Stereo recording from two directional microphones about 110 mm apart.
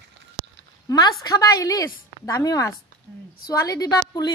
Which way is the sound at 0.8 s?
35° left (ahead or behind).